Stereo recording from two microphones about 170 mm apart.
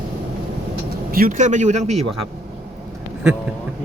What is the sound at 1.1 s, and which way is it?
Speech, 55° right (ahead or behind).